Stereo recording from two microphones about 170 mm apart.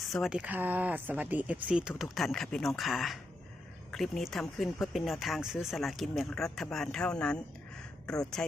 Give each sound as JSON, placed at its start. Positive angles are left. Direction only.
{"t": 0.1, "sound": "speech", "side_deg": 0}